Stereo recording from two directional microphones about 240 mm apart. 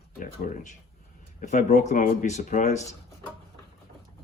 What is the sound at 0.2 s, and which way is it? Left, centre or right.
Speech, left.